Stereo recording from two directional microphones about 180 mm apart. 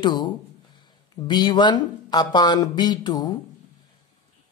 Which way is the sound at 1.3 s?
25° left (ahead or behind).